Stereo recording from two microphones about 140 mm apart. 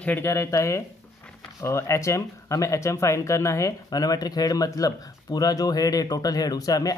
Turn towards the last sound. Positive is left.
turn(degrees=25)  # may be behind; listen again after turning